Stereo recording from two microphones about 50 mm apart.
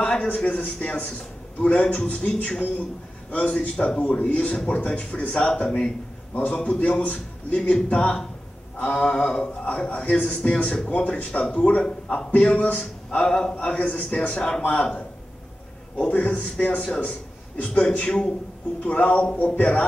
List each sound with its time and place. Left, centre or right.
0.0 s a man's voice: centre
16.1 s speech: left